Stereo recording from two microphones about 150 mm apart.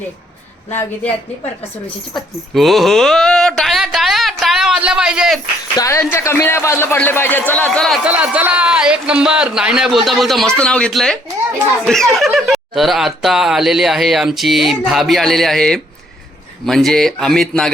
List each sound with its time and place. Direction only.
0.7 s a man's voice: 15° left (ahead or behind)
2.5 s a sound: centre (ahead or behind)
5.7 s a man's voice: 20° left (ahead or behind)
8.0 s speech: 10° right (ahead or behind)